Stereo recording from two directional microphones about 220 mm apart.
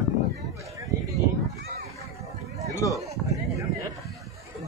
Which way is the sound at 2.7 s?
15° left (ahead or behind).